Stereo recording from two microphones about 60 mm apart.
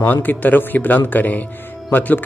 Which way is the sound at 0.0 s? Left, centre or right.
Left.